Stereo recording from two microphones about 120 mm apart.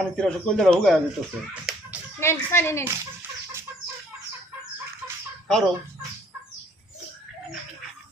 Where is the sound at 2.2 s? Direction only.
20° left (ahead or behind).